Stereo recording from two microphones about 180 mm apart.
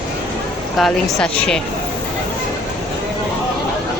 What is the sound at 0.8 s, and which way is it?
Speech, 5° left (ahead or behind).